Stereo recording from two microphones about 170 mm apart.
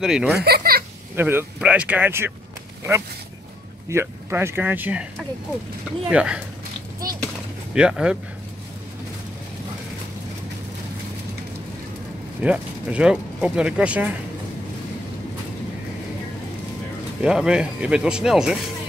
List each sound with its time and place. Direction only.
0.0 s speech: 5° right (ahead or behind)
0.4 s a sound: 65° right (ahead or behind)
1.1 s speech: 10° right (ahead or behind)
3.9 s speech: 15° right (ahead or behind)
6.0 s speech: 5° right (ahead or behind)
7.7 s speech: 5° right (ahead or behind)
12.4 s speech: 5° right (ahead or behind)
17.2 s speech: 5° right (ahead or behind)